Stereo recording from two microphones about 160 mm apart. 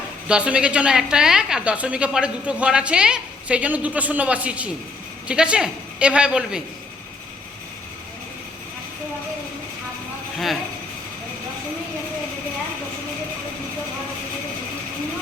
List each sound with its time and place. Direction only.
0.3 s a woman's voice: 5° right (ahead or behind)
10.3 s speech: centre (ahead or behind)